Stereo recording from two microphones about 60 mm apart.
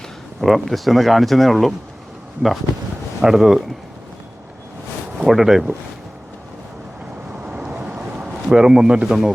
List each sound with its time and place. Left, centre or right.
0.4 s speech: centre
3.2 s speech: centre
5.2 s speech: centre
7.4 s boat: centre
8.4 s speech: centre